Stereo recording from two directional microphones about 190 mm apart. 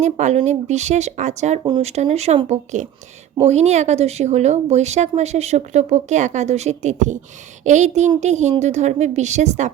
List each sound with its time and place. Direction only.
0.0 s speech: 40° right (ahead or behind)